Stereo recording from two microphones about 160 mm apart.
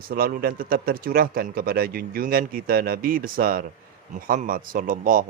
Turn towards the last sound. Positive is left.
turn(degrees=-55)  # may be behind; listen again after turning